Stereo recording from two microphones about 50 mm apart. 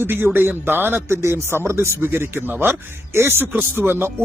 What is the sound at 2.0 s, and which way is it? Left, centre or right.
Speech, right.